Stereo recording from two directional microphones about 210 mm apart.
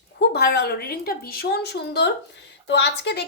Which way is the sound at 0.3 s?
50° left (ahead or behind).